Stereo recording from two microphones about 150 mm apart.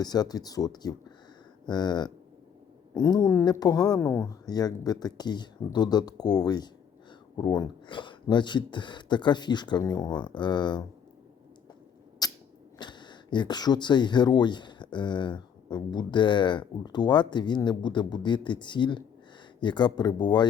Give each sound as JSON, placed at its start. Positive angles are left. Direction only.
{"t": 0.0, "sound": "speech", "side_deg": 25}
{"t": 12.2, "sound": "a sound", "side_deg": 25}
{"t": 12.8, "sound": "speech", "side_deg": 30}